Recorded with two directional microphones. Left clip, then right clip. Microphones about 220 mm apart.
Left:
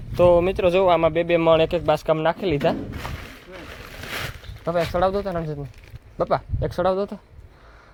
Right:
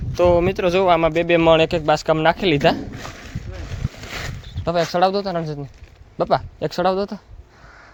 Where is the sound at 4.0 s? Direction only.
20° left (ahead or behind).